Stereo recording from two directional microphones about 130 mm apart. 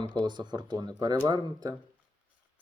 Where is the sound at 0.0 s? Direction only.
35° right (ahead or behind).